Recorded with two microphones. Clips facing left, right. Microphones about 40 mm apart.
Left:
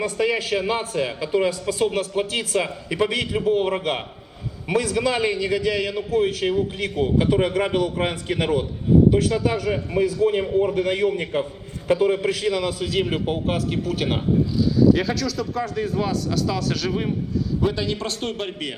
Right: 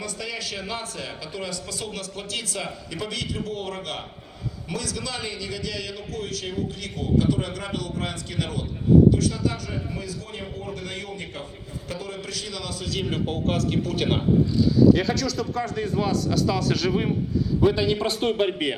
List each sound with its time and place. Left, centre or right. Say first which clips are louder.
0.0 s a man's voice: left 10 dB; left; by 18.8 s centre